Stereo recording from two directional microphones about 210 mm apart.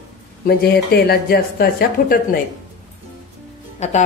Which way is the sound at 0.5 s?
45° left (ahead or behind).